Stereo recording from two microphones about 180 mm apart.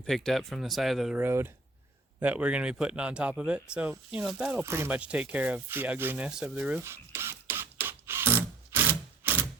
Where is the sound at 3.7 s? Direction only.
5° right (ahead or behind).